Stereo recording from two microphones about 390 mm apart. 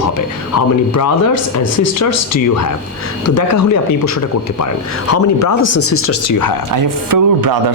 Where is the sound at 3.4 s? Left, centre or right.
Left.